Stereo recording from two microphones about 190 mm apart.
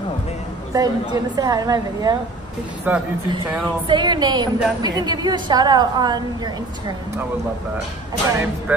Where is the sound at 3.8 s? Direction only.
25° right (ahead or behind).